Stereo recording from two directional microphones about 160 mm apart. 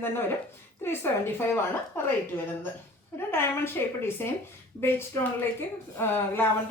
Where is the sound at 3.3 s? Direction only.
15° left (ahead or behind).